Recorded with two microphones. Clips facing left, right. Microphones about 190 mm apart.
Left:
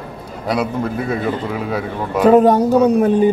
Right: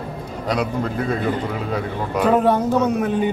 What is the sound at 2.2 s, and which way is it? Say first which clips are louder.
Speech: left 6 dB; 45° left (ahead or behind).